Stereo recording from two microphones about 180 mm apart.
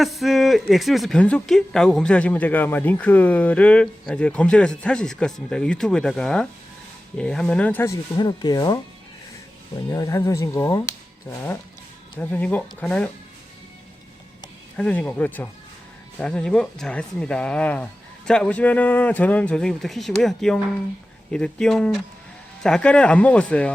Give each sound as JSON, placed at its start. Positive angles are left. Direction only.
{"t": 0.0, "sound": "speech", "side_deg": 0}
{"t": 9.9, "sound": "speech", "side_deg": 15}
{"t": 12.2, "sound": "speech", "side_deg": 10}
{"t": 14.8, "sound": "speech", "side_deg": 5}